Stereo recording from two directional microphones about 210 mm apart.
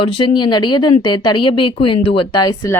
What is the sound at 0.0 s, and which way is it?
Speech, 20° left (ahead or behind).